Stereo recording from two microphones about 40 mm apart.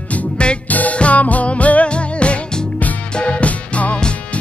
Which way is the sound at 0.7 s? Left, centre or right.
Left.